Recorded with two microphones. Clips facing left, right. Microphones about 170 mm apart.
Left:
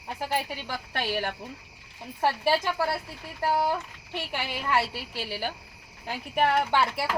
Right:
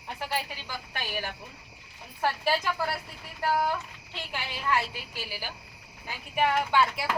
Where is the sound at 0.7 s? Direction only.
60° left (ahead or behind).